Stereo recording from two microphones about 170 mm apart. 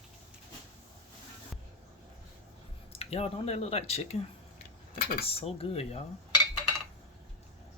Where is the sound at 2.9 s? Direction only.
35° left (ahead or behind).